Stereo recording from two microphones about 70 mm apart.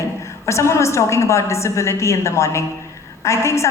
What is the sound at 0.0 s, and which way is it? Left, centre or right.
A woman's voice, left.